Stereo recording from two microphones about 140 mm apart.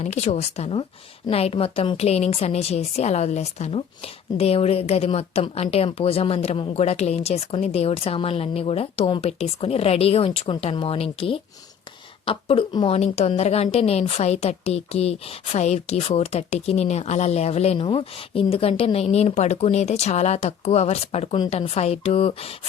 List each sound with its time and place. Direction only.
0.0 s a woman's voice: 55° left (ahead or behind)